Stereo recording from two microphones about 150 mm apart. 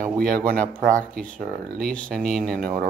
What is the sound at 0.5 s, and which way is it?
Speech, 65° right (ahead or behind).